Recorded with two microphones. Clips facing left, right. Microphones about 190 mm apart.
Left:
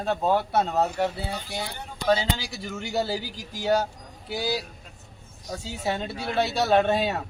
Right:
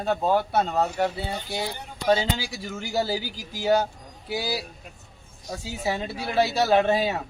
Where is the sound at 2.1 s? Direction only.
15° right (ahead or behind).